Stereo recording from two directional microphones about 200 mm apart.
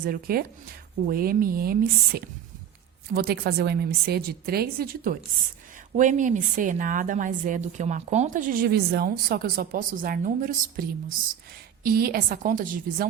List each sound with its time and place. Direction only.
0.0 s a woman's voice: 45° right (ahead or behind)